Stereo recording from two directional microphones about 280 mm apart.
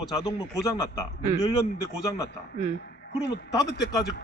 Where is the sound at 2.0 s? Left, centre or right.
Centre.